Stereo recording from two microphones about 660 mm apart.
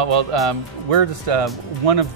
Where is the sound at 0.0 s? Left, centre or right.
Right.